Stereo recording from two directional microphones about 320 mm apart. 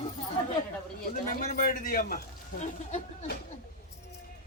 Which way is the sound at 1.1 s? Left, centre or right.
Left.